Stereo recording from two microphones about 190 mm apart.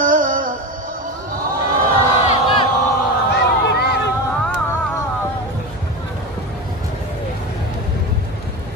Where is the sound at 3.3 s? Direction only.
60° left (ahead or behind).